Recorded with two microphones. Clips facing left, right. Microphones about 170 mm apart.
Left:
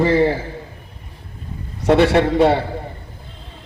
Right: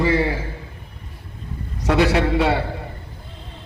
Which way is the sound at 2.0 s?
60° left (ahead or behind).